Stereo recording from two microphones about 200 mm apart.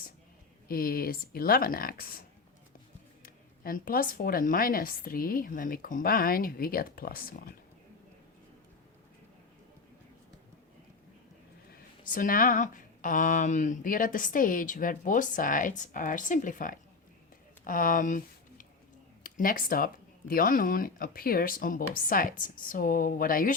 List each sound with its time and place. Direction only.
0.7 s speech: 45° left (ahead or behind)
3.2 s speech: 45° left (ahead or behind)
11.7 s speech: 40° left (ahead or behind)